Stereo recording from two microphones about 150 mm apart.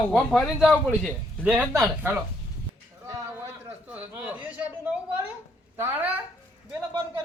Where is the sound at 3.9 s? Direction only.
10° right (ahead or behind).